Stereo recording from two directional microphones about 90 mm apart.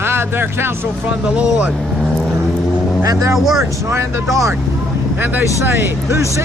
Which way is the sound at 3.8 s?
30° right (ahead or behind).